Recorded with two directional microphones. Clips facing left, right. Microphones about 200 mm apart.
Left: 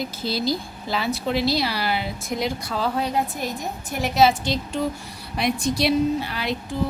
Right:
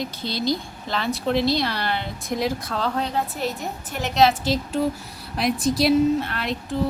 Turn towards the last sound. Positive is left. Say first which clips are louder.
# even
turn(degrees=0)  # may be behind; listen again after turning